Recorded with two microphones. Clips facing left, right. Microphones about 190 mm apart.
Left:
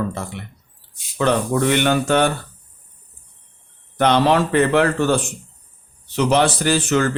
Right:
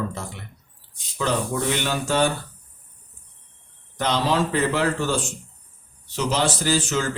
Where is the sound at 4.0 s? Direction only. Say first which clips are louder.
Left 6 dB; 60° left (ahead or behind).